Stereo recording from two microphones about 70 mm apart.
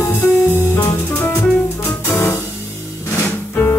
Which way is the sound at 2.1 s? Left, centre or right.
Left.